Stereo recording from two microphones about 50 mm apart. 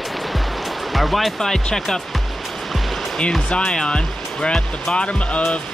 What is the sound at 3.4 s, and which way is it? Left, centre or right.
Speech, centre.